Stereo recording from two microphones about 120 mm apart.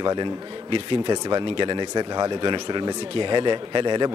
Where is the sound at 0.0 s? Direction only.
40° right (ahead or behind).